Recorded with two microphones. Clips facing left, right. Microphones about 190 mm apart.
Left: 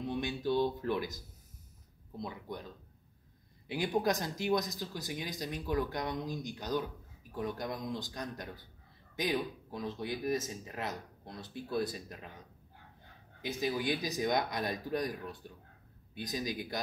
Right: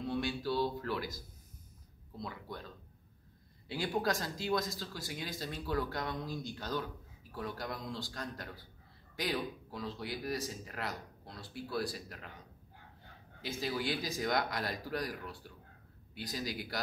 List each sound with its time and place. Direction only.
0.0 s speech: 20° left (ahead or behind)
3.6 s speech: 20° left (ahead or behind)
13.4 s speech: 15° left (ahead or behind)